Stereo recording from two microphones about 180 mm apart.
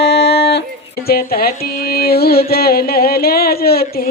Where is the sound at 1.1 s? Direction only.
55° left (ahead or behind).